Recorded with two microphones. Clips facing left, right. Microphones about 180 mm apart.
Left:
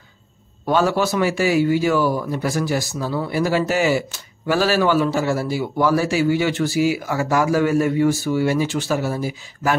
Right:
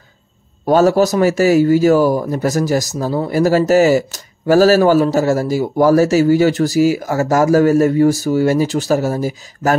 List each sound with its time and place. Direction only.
0.7 s a man's voice: 40° right (ahead or behind)